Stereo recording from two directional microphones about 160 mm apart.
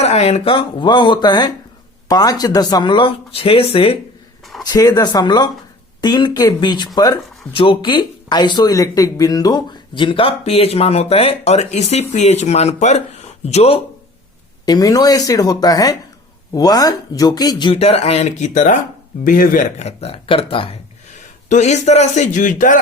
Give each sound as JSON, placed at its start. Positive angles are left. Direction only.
{"t": 0.0, "sound": "speech", "side_deg": 40}
{"t": 4.6, "sound": "speech", "side_deg": 25}
{"t": 14.6, "sound": "a man's voice", "side_deg": 25}
{"t": 19.8, "sound": "speech", "side_deg": 40}
{"t": 21.5, "sound": "speech", "side_deg": 45}